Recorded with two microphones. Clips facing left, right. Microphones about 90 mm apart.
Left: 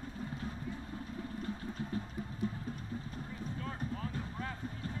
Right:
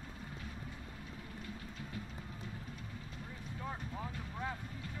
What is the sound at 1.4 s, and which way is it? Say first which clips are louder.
Vehicle: left 7 dB; 40° left (ahead or behind).